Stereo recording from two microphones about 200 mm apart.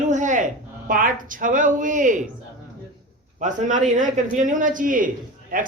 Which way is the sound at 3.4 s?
40° right (ahead or behind).